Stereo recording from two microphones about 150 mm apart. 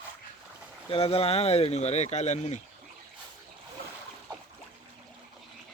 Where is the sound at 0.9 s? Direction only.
40° left (ahead or behind).